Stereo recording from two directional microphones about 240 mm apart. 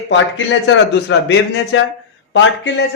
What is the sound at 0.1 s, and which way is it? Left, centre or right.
A man's voice, left.